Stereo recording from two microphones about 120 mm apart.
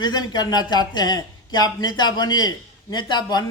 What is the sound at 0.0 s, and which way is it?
A man's voice, 35° left (ahead or behind).